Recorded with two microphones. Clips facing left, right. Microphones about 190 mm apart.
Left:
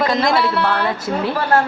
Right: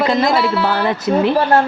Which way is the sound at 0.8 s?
20° right (ahead or behind).